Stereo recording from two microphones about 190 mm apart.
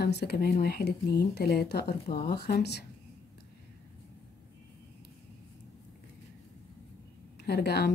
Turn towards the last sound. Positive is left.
turn(degrees=60)  # may be behind; listen again after turning